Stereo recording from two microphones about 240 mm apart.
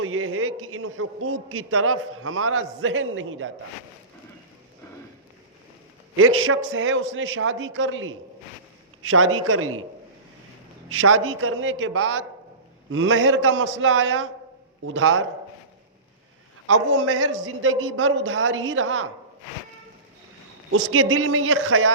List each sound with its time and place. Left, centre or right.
0.0 s a man's voice: right
6.1 s a man's voice: right
10.8 s a man's voice: right
16.6 s a man's voice: right
20.7 s a man's voice: right